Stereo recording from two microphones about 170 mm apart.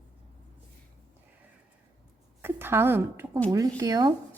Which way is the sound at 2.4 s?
15° right (ahead or behind).